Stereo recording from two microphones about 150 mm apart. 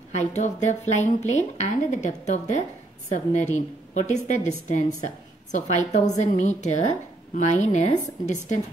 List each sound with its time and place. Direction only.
0.1 s a woman's voice: 50° left (ahead or behind)